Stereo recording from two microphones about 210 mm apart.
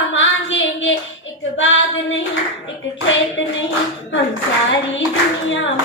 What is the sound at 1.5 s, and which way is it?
Female singing, 65° left (ahead or behind).